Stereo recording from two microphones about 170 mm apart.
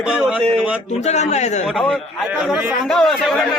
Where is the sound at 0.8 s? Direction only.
40° left (ahead or behind).